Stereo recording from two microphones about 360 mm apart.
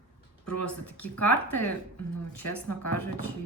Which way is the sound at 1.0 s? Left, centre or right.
Left.